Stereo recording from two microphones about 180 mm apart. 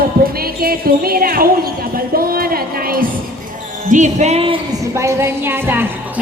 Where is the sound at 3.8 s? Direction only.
45° right (ahead or behind).